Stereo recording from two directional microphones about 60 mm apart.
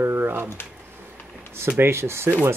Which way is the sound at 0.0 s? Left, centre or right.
Right.